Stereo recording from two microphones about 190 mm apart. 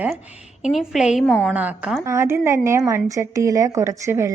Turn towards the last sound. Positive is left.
turn(degrees=-15)  # may be behind; listen again after turning